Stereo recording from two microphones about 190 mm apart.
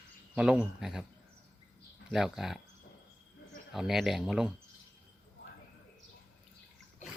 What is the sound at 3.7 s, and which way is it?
Speech, centre (ahead or behind).